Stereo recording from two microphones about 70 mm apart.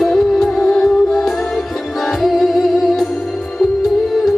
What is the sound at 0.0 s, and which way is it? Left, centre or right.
Music, centre.